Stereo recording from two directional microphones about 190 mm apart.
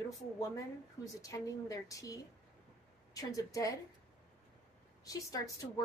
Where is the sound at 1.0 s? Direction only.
15° left (ahead or behind).